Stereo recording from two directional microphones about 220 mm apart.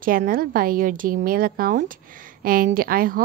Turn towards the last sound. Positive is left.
turn(degrees=-40)  # may be behind; listen again after turning